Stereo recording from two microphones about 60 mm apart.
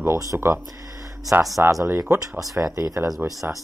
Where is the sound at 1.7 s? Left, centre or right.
Right.